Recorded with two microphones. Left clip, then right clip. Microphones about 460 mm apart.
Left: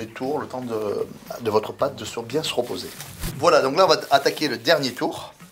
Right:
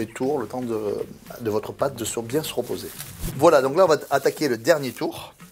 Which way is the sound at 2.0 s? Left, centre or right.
Right.